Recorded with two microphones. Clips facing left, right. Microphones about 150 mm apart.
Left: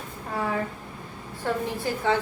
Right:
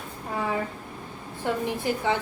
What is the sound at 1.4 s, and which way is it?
Speech, 15° right (ahead or behind).